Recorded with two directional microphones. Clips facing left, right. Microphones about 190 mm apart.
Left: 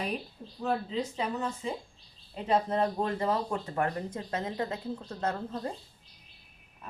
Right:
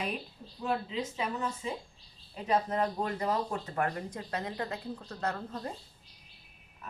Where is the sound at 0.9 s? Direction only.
35° left (ahead or behind).